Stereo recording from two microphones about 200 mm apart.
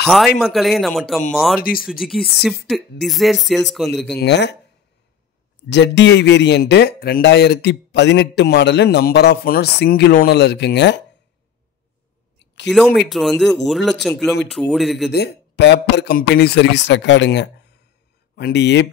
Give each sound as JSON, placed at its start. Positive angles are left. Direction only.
{"t": 0.0, "sound": "speech", "side_deg": 0}
{"t": 4.2, "sound": "speech", "side_deg": 60}
{"t": 5.7, "sound": "speech", "side_deg": 60}
{"t": 12.6, "sound": "speech", "side_deg": 0}
{"t": 15.0, "sound": "speech", "side_deg": 55}